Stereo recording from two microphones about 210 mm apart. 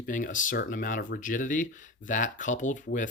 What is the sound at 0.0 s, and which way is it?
Speech, 40° left (ahead or behind).